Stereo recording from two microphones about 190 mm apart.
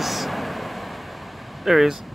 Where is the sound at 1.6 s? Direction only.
Centre (ahead or behind).